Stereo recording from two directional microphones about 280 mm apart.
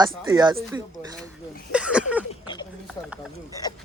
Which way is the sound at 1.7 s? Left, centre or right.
Centre.